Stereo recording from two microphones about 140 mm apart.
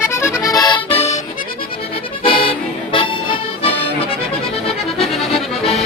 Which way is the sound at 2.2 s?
40° left (ahead or behind).